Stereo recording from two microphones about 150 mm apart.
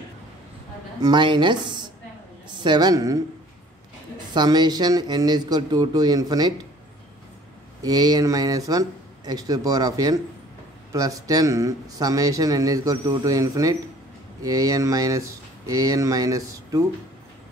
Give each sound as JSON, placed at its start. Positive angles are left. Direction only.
{"t": 1.0, "sound": "speech", "side_deg": -30}
{"t": 4.3, "sound": "speech", "side_deg": -30}
{"t": 7.8, "sound": "speech", "side_deg": -25}